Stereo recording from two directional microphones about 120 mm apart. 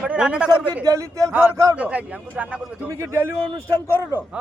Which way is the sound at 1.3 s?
10° right (ahead or behind).